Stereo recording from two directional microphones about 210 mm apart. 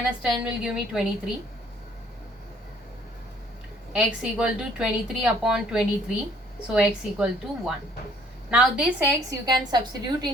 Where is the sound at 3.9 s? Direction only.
5° right (ahead or behind).